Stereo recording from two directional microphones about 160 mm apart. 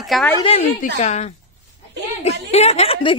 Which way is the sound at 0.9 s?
45° left (ahead or behind).